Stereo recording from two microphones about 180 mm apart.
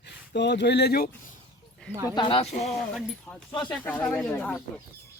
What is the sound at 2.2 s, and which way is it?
Speech, 30° left (ahead or behind).